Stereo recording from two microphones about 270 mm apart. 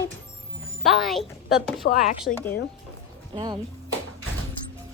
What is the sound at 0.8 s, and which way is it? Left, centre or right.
A woman's voice, centre.